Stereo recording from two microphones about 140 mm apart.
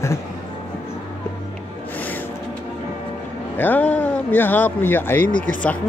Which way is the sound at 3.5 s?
15° left (ahead or behind).